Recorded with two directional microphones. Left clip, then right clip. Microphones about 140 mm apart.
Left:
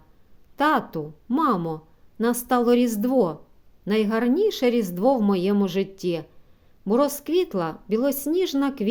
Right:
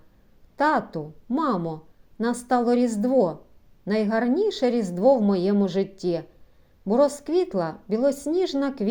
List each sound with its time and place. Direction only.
0.5 s a woman's voice: 25° left (ahead or behind)